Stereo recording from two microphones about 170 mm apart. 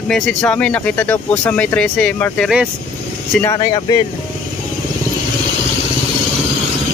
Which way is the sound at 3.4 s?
25° left (ahead or behind).